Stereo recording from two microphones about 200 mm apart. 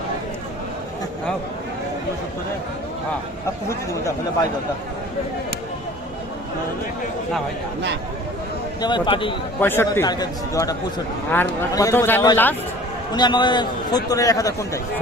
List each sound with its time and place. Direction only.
8.8 s a man's voice: 25° left (ahead or behind)
9.6 s a man's voice: 10° left (ahead or behind)
13.1 s a man's voice: 20° left (ahead or behind)